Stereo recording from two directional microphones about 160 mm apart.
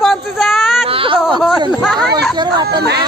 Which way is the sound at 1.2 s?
5° right (ahead or behind).